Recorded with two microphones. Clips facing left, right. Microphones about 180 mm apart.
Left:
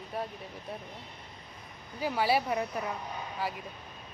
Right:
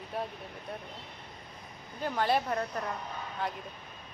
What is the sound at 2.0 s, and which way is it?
A woman's voice, 5° left (ahead or behind).